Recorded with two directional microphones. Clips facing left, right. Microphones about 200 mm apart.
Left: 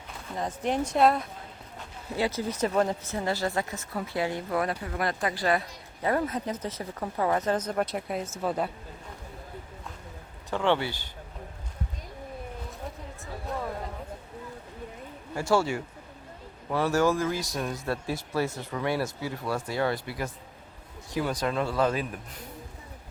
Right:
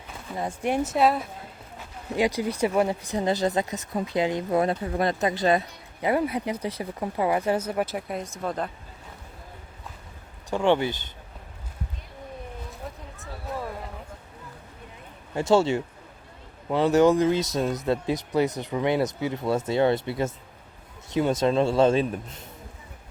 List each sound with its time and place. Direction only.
0.3 s speech: 10° right (ahead or behind)
2.1 s speech: 15° right (ahead or behind); by 8.7 s 5° left (ahead or behind)
10.5 s speech: 15° right (ahead or behind)
15.4 s speech: 25° right (ahead or behind)